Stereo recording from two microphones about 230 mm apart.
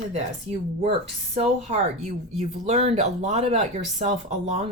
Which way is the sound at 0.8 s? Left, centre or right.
Right.